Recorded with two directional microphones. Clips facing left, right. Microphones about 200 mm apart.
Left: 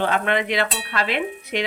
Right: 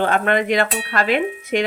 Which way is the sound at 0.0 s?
45° right (ahead or behind).